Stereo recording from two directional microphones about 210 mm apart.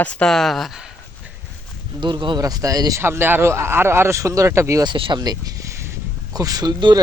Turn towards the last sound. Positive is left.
turn(degrees=-20)  # may be behind; listen again after turning